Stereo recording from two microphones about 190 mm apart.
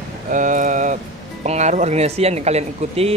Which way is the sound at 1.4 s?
35° right (ahead or behind).